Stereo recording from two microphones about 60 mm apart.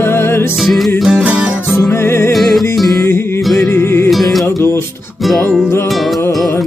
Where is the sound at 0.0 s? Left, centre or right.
Left.